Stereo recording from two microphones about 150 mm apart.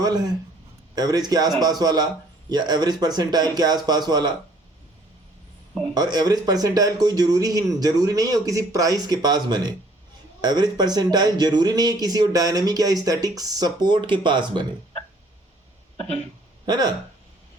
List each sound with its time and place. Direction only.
0.9 s speech: 25° right (ahead or behind)
5.9 s speech: 25° right (ahead or behind)
16.6 s speech: 30° right (ahead or behind)